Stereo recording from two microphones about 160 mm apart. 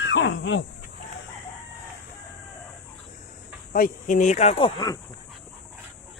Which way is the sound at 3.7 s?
55° left (ahead or behind).